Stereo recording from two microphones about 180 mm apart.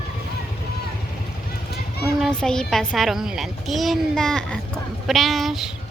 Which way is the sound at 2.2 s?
5° left (ahead or behind).